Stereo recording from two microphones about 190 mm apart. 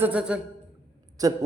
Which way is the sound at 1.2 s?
20° right (ahead or behind).